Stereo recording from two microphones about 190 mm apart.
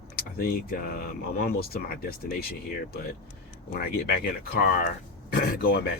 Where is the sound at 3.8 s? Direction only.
55° left (ahead or behind).